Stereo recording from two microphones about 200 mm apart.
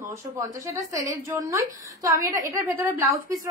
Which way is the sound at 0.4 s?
15° right (ahead or behind).